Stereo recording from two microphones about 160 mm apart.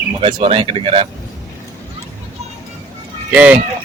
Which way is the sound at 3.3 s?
10° right (ahead or behind).